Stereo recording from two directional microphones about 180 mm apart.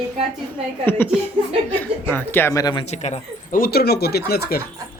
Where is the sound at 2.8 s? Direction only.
40° left (ahead or behind); by 4.6 s 60° left (ahead or behind).